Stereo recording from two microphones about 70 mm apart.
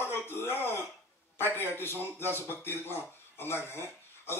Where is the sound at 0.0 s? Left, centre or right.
Left.